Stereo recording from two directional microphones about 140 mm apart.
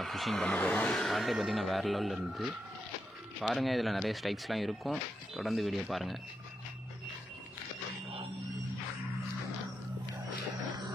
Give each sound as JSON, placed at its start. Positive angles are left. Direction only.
{"t": 0.0, "sound": "speech", "side_deg": 0}